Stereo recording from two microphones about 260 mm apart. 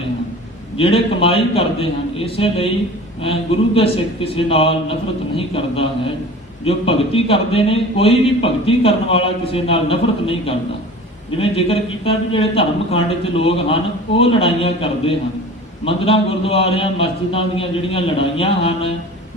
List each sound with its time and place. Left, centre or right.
0.8 s a man's voice: left
3.8 s a man's voice: left